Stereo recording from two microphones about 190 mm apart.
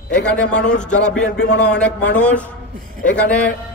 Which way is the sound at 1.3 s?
65° left (ahead or behind).